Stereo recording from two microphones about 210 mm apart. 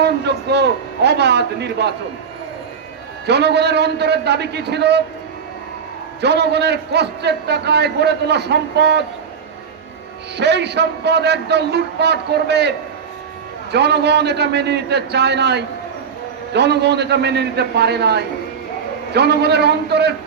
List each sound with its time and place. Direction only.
0.0 s a man's voice: 55° right (ahead or behind)
3.2 s a man's voice: 55° right (ahead or behind)
6.2 s a man's voice: 55° right (ahead or behind)
10.3 s a man's voice: 55° right (ahead or behind)
13.7 s a man's voice: 50° right (ahead or behind)